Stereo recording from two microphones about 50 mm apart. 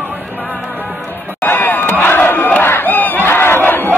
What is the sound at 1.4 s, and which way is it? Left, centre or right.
Crowd, left.